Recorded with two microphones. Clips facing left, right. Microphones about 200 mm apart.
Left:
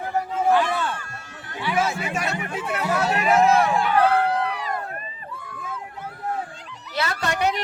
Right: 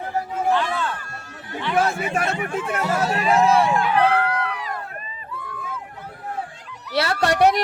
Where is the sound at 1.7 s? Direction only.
55° right (ahead or behind).